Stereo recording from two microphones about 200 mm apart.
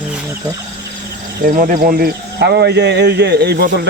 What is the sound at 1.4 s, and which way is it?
Speech, 45° right (ahead or behind).